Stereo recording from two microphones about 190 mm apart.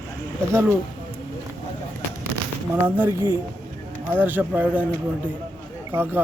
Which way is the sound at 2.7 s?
10° right (ahead or behind).